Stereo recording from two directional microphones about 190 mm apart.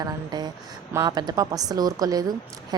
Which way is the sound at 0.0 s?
20° right (ahead or behind).